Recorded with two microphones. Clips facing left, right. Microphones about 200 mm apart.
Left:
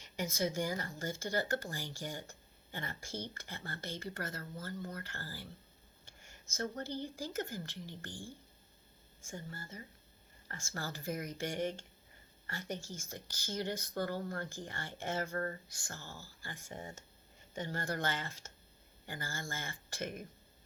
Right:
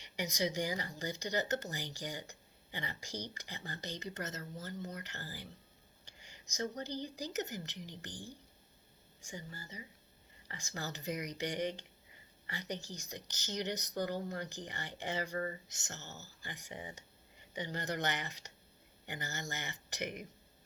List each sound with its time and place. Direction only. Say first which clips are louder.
0.0 s speech: even; 15° right (ahead or behind)
9.2 s speech: left 1 dB; 15° right (ahead or behind)